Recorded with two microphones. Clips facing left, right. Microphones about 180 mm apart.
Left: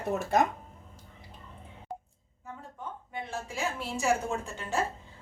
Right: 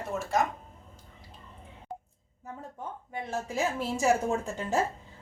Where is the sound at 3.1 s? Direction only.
40° right (ahead or behind).